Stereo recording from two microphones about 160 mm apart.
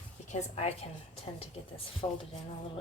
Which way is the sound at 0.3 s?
40° left (ahead or behind).